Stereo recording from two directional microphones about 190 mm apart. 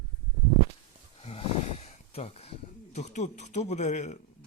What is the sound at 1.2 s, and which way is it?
A man's voice, 30° left (ahead or behind).